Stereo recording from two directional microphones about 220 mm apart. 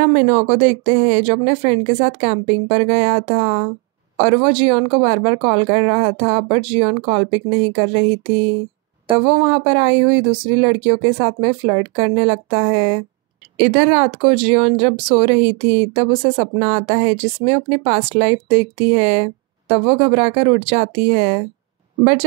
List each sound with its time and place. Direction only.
0.2 s speech: 35° right (ahead or behind)